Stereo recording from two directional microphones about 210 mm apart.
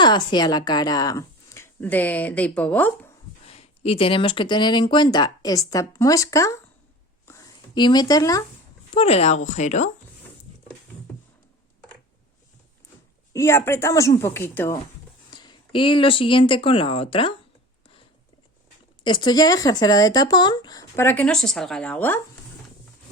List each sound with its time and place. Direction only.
0.0 s speech: 20° left (ahead or behind)
3.4 s speech: 30° left (ahead or behind)
7.3 s a sound: 15° left (ahead or behind)
8.9 s speech: 30° left (ahead or behind)
13.3 s speech: 15° left (ahead or behind)
19.0 s speech: 20° left (ahead or behind)